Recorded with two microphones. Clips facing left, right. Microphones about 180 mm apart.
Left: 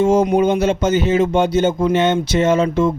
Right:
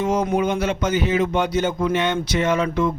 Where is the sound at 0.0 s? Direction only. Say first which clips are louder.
Left 6 dB; 30° left (ahead or behind).